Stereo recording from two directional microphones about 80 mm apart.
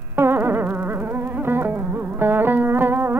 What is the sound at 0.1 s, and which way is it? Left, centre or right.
Music, right.